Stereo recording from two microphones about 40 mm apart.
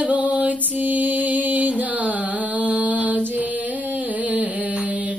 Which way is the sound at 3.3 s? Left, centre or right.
Right.